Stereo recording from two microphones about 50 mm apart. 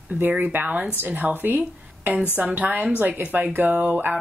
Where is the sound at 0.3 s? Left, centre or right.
Right.